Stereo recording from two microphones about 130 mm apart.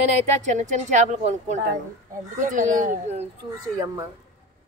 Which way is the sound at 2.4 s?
85° right.